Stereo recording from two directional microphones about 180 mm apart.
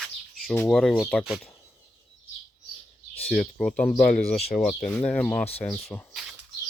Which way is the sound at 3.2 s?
Centre (ahead or behind).